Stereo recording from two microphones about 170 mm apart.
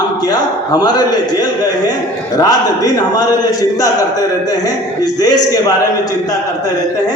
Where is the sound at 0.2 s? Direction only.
25° left (ahead or behind).